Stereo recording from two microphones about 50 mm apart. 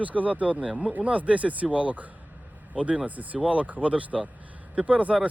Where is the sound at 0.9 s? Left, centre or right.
Right.